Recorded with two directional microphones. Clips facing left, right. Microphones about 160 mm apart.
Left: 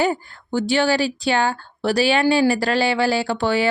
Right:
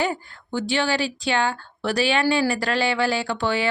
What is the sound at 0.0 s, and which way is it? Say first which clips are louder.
A woman's voice: left 4 dB; 35° left (ahead or behind).